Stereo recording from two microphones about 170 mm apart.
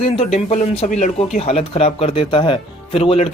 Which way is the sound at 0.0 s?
40° left (ahead or behind).